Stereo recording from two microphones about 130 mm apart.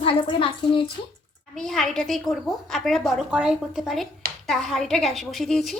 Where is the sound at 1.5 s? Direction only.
5° left (ahead or behind).